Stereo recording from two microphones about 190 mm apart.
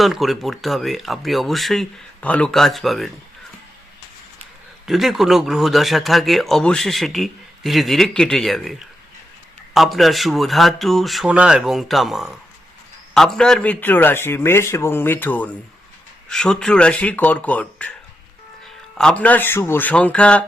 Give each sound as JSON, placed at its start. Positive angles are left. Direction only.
{"t": 0.0, "sound": "speech", "side_deg": 0}
{"t": 4.9, "sound": "speech", "side_deg": 0}
{"t": 9.7, "sound": "a man's voice", "side_deg": 0}
{"t": 18.9, "sound": "a man's voice", "side_deg": 5}